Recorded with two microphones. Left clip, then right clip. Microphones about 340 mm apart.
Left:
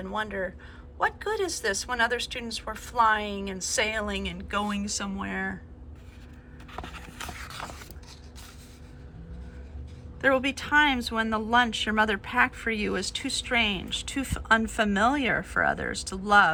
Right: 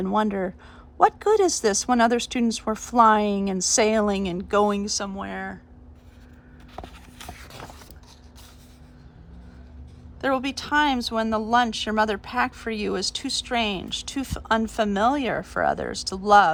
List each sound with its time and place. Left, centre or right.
0.0 s speech: centre
6.7 s a sound: centre
10.2 s speech: centre